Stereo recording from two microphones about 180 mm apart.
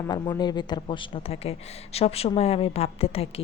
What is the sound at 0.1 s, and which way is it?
Speech, 25° left (ahead or behind).